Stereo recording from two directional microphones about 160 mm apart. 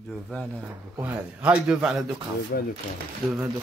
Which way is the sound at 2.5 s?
80° left.